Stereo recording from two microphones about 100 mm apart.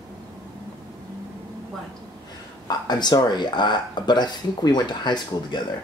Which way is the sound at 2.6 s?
45° left (ahead or behind).